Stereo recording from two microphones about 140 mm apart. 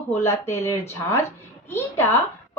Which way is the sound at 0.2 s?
20° left (ahead or behind).